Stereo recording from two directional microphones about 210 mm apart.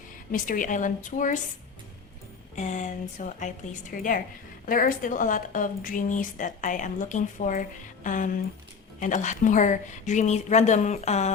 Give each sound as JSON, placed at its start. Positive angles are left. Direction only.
{"t": 0.3, "sound": "a woman's voice", "side_deg": 40}
{"t": 2.6, "sound": "a woman's voice", "side_deg": 35}